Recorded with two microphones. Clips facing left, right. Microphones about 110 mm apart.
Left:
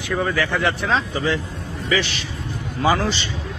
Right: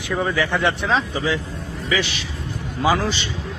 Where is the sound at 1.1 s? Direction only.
5° right (ahead or behind).